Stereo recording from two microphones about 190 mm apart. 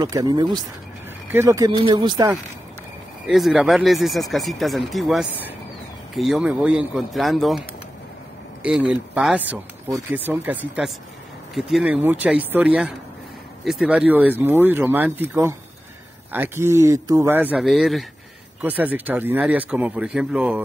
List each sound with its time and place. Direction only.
0.0 s speech: 20° right (ahead or behind)
3.3 s speech: centre (ahead or behind)
8.6 s speech: 5° right (ahead or behind)